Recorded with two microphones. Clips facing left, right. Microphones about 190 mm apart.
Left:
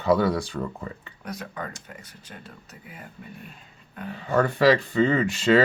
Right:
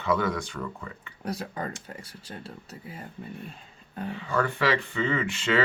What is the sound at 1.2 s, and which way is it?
Speech, 30° right (ahead or behind).